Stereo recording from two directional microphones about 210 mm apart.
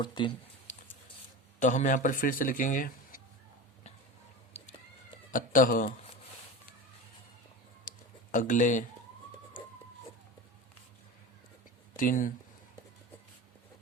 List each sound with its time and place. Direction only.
0.0 s speech: 20° left (ahead or behind)
1.5 s speech: 35° left (ahead or behind)
5.3 s speech: 40° left (ahead or behind)
8.3 s speech: 35° left (ahead or behind)
11.9 s speech: 40° left (ahead or behind)